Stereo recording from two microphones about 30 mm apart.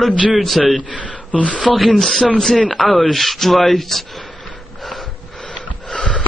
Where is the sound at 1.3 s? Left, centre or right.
Left.